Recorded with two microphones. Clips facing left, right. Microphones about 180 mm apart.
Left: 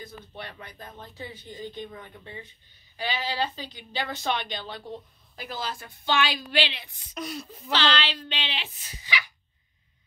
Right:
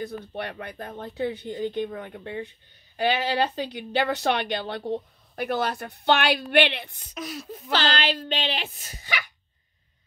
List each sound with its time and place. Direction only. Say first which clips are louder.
0.0 s a woman's voice: right 9 dB; 65° right (ahead or behind)
7.2 s speech: right 1 dB; centre (ahead or behind)
7.7 s speech: right 2 dB; 45° right (ahead or behind)